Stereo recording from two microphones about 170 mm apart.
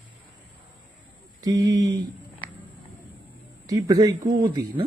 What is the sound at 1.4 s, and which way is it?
Speech, 20° right (ahead or behind).